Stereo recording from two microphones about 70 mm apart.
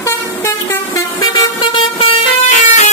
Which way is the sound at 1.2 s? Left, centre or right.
Left.